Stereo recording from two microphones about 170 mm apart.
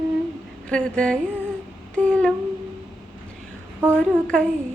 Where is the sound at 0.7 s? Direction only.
5° left (ahead or behind).